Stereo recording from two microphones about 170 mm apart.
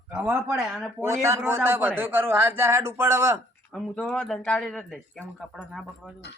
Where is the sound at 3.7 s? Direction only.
5° left (ahead or behind).